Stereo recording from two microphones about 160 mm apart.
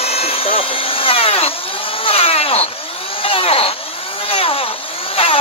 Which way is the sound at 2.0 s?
35° left (ahead or behind).